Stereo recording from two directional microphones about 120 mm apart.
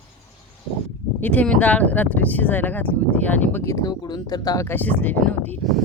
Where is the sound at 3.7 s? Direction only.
25° left (ahead or behind).